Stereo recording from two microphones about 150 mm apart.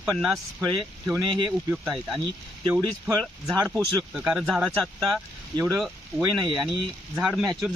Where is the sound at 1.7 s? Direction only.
Centre (ahead or behind).